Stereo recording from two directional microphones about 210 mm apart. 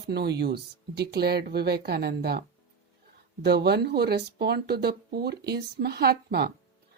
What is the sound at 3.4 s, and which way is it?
Speech, 50° right (ahead or behind).